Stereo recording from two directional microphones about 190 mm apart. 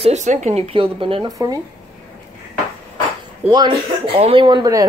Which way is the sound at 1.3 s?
20° right (ahead or behind).